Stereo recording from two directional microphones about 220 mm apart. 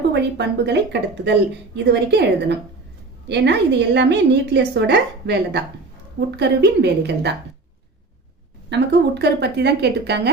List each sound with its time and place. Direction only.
0.1 s a woman's voice: 50° right (ahead or behind)
8.7 s a woman's voice: 50° right (ahead or behind)